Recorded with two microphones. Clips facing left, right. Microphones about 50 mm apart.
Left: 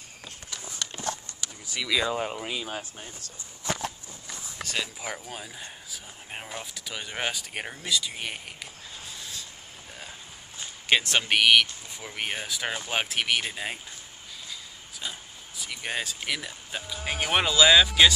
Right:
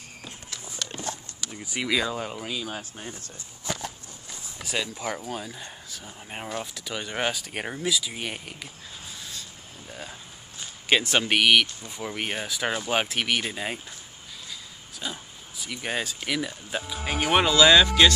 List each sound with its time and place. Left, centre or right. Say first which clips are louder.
0.9 s horse: right 1 dB; centre
1.6 s speech: right 2 dB; right
2.1 s speech: left 1 dB; centre
5.1 s speech: right 5 dB; centre
9.0 s a sound: even; centre
10.9 s speech: right 1 dB; centre